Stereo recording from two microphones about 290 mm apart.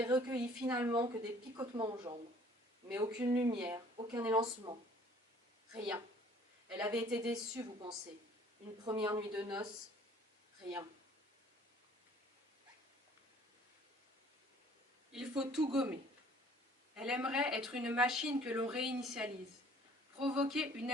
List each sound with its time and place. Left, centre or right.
0.0 s speech: centre
8.8 s speech: centre
15.1 s speech: centre
20.3 s speech: centre